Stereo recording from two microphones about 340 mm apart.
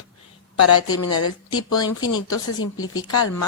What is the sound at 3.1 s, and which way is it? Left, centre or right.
Speech, left.